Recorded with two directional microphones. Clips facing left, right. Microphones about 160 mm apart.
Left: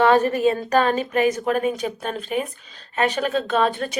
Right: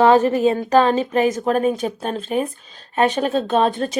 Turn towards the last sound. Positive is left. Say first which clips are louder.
# right 3 dB
turn(degrees=-35)  # may be behind; listen again after turning